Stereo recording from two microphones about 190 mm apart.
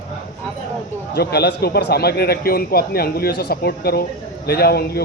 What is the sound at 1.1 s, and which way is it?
A man's voice, 60° left (ahead or behind).